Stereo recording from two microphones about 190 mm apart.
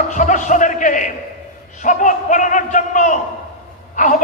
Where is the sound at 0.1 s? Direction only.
40° left (ahead or behind).